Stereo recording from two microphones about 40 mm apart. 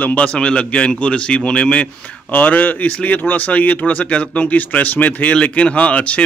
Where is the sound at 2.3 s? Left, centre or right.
Left.